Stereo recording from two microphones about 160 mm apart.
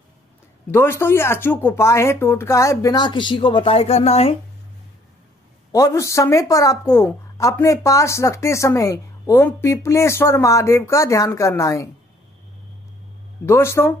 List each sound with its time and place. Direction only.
0.7 s speech: 15° left (ahead or behind); by 4.4 s 40° left (ahead or behind)
5.7 s a woman's voice: 20° left (ahead or behind)
13.5 s speech: 15° left (ahead or behind)